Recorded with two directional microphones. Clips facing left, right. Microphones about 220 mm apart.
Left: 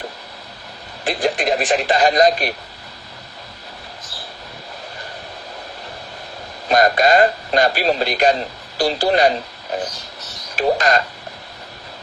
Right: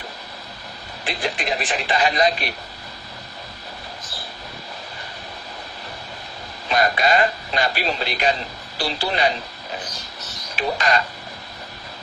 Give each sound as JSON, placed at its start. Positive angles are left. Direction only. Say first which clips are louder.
{"t": 1.0, "sound": "speech", "louder": "left 7 dB", "side_deg": 45}
{"t": 6.7, "sound": "speech", "louder": "left 5 dB", "side_deg": 45}
{"t": 10.5, "sound": "speech", "louder": "left 5 dB", "side_deg": 45}